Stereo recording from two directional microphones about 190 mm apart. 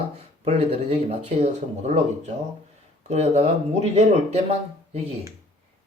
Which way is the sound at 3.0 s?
35° right (ahead or behind).